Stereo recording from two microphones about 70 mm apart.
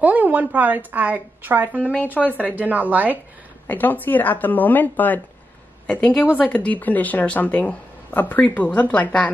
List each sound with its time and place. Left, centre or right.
0.0 s a woman's voice: right
1.9 s speech: left
2.5 s a woman's voice: right
3.6 s a woman's voice: left